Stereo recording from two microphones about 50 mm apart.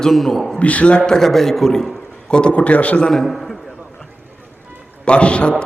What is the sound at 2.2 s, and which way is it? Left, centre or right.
Speech, centre.